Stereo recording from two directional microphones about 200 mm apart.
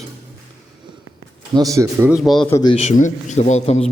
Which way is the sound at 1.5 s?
15° right (ahead or behind).